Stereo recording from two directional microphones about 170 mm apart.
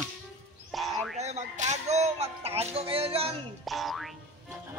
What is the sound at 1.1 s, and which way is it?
Music, 45° right (ahead or behind).